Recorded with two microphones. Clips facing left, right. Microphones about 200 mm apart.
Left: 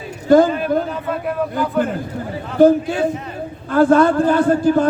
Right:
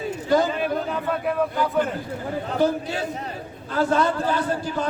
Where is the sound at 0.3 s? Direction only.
50° left (ahead or behind).